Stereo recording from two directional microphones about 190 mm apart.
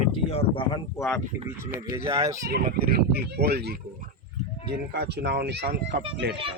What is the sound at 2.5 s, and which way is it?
Speech, 55° right (ahead or behind).